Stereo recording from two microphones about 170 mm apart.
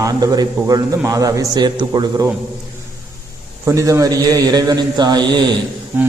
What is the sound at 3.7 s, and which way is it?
A man's voice, 20° right (ahead or behind).